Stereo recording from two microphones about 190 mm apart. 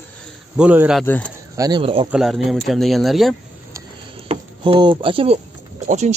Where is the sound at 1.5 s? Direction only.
20° right (ahead or behind).